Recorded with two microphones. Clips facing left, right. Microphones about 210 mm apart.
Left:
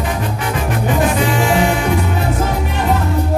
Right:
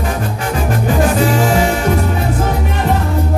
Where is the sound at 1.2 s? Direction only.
40° right (ahead or behind).